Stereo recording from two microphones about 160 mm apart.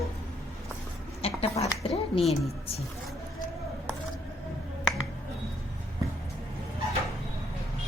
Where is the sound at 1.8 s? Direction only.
35° left (ahead or behind).